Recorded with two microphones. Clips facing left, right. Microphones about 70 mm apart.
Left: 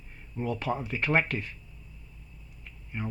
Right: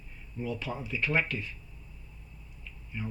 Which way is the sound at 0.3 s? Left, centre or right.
Left.